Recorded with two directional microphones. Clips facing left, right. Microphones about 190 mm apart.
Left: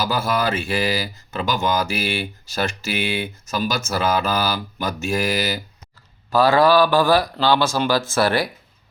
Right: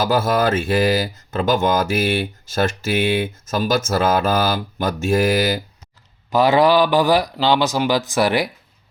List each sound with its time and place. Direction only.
0.0 s speech: 45° right (ahead or behind)
6.3 s speech: 20° right (ahead or behind)